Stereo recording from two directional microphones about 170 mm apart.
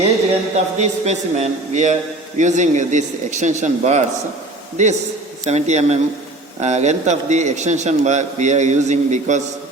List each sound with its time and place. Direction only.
0.5 s a man's voice: 40° right (ahead or behind)